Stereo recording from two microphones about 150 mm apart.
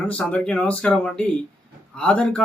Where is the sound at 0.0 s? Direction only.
10° left (ahead or behind).